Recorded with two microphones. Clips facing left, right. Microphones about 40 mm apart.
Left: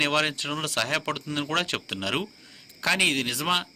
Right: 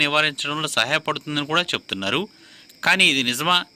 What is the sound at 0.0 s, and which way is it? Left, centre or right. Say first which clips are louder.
A man's voice: right 4 dB; right.